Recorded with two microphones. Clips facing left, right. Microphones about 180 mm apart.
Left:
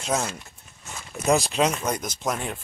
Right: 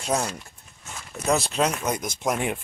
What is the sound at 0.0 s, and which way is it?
Speech, 10° right (ahead or behind).